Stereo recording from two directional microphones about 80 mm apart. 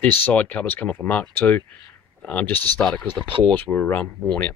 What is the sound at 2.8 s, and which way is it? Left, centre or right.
Speech, centre.